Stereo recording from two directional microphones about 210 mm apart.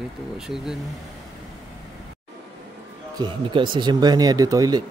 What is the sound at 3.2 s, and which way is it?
Speech, 20° right (ahead or behind).